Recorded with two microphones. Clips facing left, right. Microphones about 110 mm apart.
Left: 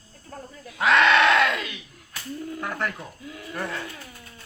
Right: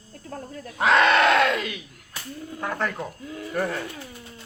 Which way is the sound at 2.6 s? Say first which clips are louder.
Right 3 dB; 25° right (ahead or behind).